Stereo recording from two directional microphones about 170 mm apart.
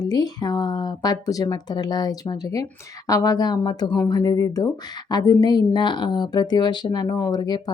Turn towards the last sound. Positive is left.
turn(degrees=25)  # may be behind; listen again after turning